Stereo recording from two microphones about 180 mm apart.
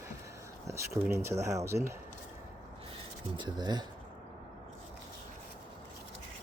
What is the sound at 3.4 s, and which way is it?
Speech, 25° right (ahead or behind).